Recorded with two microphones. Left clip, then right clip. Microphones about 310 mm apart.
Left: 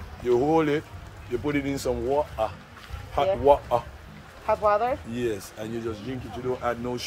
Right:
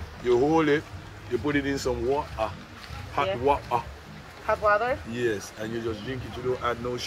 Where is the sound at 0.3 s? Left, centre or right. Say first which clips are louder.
Even; left.